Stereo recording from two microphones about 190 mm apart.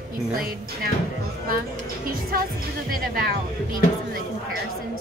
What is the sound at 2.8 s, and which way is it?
Speech, 50° right (ahead or behind).